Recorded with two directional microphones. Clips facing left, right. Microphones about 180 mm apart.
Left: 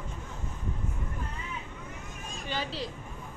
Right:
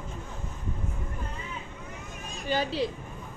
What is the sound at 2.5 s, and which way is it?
Speech, 50° right (ahead or behind).